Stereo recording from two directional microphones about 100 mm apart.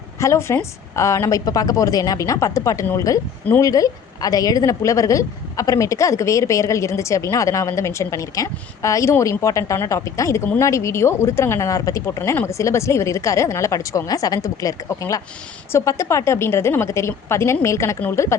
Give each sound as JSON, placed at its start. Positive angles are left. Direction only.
{"t": 0.2, "sound": "a woman's voice", "side_deg": 30}